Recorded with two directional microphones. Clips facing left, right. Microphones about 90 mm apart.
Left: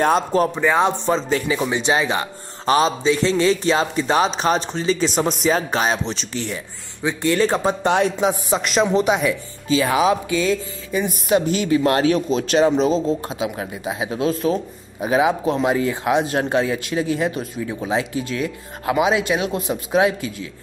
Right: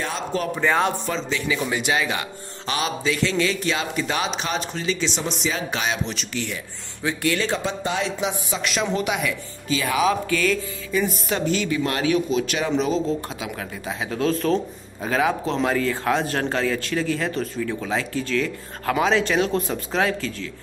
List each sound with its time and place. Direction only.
0.6 s speech: 20° left (ahead or behind)
1.1 s a man's voice: 35° left (ahead or behind)
5.0 s a man's voice: 45° left (ahead or behind)
7.0 s speech: 20° left (ahead or behind)
7.3 s speech: 40° left (ahead or behind)
7.8 s speech: 60° left (ahead or behind)
8.2 s a man's voice: 40° left (ahead or behind); by 11.7 s 20° left (ahead or behind)
11.7 s speech: 35° left (ahead or behind); by 20.4 s 15° left (ahead or behind)